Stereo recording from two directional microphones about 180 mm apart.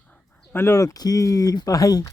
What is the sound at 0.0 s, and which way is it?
Speech, 10° left (ahead or behind).